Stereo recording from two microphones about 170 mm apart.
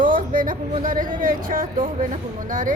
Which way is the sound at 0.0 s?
55° right (ahead or behind).